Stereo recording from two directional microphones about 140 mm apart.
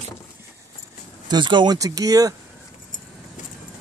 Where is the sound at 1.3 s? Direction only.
35° right (ahead or behind).